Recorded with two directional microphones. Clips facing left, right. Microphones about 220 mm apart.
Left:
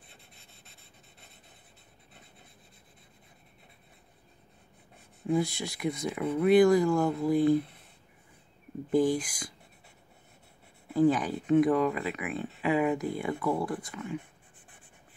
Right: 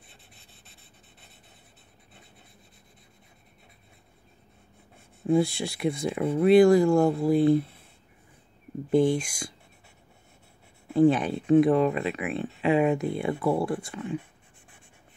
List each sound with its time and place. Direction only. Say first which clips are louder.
5.2 s speech: right 5 dB; 30° right (ahead or behind)
8.9 s speech: right 3 dB; 25° right (ahead or behind)
10.9 s speech: right 4 dB; 25° right (ahead or behind)